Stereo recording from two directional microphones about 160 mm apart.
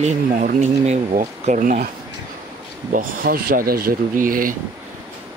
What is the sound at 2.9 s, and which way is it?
Speech, 65° right (ahead or behind).